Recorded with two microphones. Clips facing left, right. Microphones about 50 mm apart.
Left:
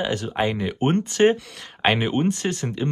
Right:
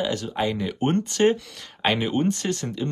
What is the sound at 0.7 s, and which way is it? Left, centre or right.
Speech, centre.